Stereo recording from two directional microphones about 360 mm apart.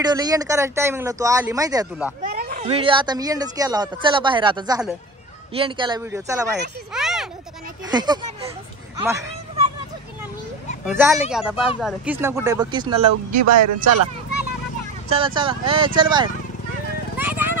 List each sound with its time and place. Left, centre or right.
0.0 s speech: centre
2.2 s speech: right; by 6.5 s centre
6.9 s a sound: centre
7.9 s speech: centre
9.0 s a sound: centre
10.9 s speech: centre
13.4 s speech: right
15.0 s speech: centre
17.2 s horse: centre